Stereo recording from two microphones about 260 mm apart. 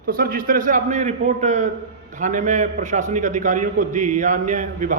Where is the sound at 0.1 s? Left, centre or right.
Right.